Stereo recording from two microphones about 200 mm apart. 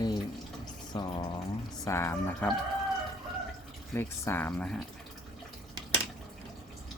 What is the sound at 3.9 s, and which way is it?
Speech, 10° left (ahead or behind).